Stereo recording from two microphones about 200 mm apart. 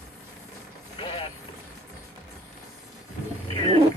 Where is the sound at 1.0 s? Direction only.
25° left (ahead or behind).